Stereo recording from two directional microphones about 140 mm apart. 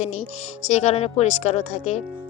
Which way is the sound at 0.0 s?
50° left (ahead or behind).